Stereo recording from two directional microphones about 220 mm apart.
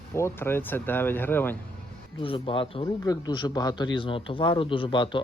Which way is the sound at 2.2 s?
25° left (ahead or behind).